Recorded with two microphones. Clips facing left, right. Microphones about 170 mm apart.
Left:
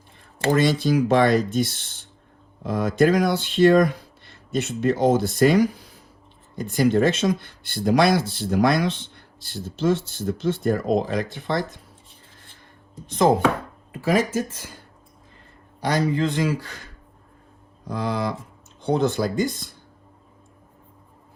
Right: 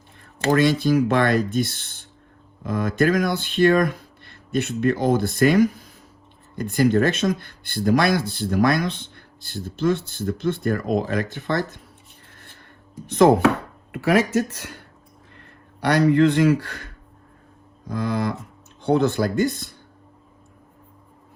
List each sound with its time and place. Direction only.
0.5 s speech: 55° right (ahead or behind)
13.1 s speech: 60° right (ahead or behind)
13.9 s a man's voice: 70° right (ahead or behind)
17.8 s music: 50° right (ahead or behind)
18.8 s speech: 60° right (ahead or behind)